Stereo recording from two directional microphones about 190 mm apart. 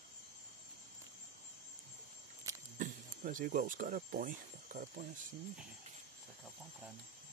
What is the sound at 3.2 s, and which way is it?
Speech, 45° right (ahead or behind).